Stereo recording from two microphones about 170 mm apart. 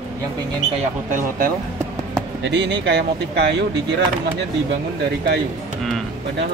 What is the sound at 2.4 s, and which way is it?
Speech, 90° right.